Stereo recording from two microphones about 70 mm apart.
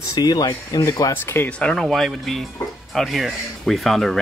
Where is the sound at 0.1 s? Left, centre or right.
Left.